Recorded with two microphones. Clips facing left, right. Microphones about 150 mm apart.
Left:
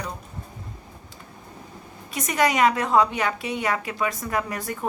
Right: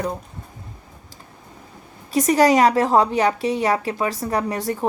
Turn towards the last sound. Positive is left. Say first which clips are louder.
# right 5 dB
turn(degrees=-30)  # may be behind; listen again after turning